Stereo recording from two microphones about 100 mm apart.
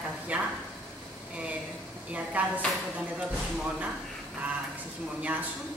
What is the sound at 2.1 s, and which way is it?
A woman's voice, 15° right (ahead or behind).